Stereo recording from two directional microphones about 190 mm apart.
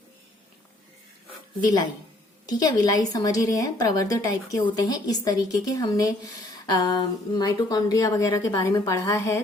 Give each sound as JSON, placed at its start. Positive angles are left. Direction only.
{"t": 1.6, "sound": "speech", "side_deg": 20}